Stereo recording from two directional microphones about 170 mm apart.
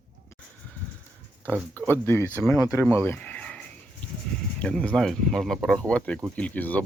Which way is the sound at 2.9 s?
15° left (ahead or behind).